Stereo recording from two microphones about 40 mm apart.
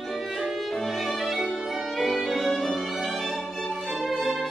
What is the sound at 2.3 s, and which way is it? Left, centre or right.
Music, centre.